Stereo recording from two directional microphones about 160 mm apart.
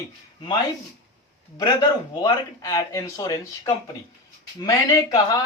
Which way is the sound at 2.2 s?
25° left (ahead or behind).